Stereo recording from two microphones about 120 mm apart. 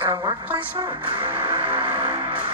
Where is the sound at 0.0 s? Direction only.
15° right (ahead or behind).